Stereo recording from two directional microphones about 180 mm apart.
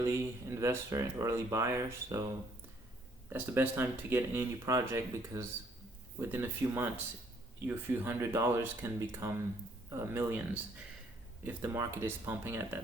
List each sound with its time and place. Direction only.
0.0 s speech: 15° right (ahead or behind)
3.2 s speech: 10° right (ahead or behind)